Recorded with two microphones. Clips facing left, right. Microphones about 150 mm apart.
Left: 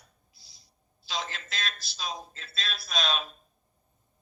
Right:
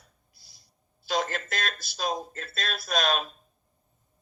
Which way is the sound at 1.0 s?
50° right (ahead or behind).